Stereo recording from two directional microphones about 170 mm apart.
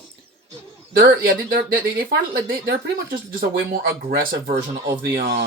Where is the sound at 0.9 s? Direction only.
60° right (ahead or behind).